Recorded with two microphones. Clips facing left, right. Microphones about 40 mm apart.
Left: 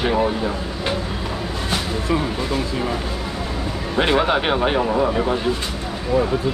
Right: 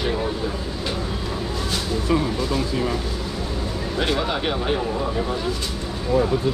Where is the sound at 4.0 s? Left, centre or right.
Left.